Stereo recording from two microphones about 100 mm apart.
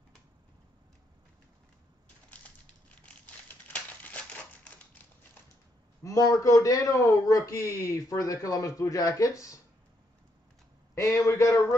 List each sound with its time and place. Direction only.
2.3 s a sound: 15° left (ahead or behind)
3.6 s crumpling: 15° left (ahead or behind)
6.0 s a man's voice: 35° left (ahead or behind)
11.0 s a man's voice: 30° left (ahead or behind)